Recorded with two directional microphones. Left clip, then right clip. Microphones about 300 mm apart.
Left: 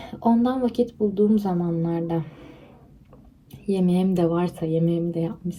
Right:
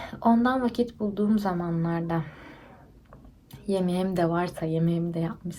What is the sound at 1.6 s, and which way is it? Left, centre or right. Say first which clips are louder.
Speech: left 4 dB; right.